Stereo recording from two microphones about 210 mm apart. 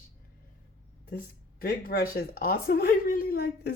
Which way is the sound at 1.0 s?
40° left (ahead or behind).